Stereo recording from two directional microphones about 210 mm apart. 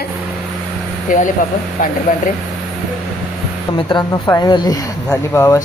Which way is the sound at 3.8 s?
20° left (ahead or behind).